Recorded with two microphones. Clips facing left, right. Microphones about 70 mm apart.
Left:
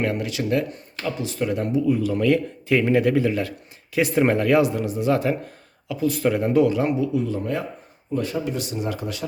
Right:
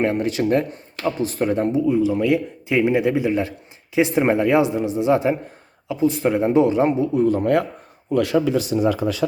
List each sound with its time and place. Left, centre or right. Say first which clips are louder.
0.0 s speech: right 5 dB; right
8.1 s speech: right 7 dB; right